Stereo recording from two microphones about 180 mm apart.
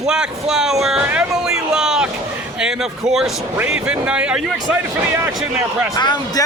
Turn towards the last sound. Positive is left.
turn(degrees=20)  # may be behind; listen again after turning